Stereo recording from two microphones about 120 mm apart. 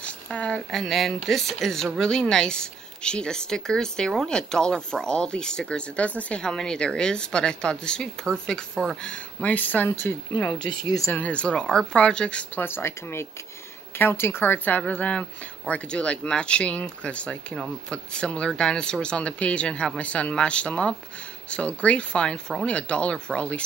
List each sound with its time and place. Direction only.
0.0 s a woman's voice: 10° left (ahead or behind)
10.5 s speech: 35° left (ahead or behind)
11.1 s a woman's voice: 10° left (ahead or behind)